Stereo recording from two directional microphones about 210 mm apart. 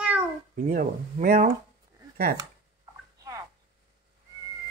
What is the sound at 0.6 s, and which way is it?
Speech, 40° right (ahead or behind).